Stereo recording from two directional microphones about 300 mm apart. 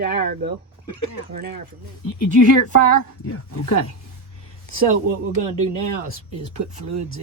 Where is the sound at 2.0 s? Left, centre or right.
Left.